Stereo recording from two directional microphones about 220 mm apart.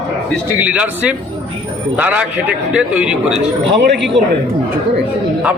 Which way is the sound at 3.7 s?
50° right (ahead or behind).